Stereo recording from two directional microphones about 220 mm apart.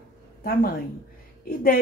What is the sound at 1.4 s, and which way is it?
Speech, 40° left (ahead or behind).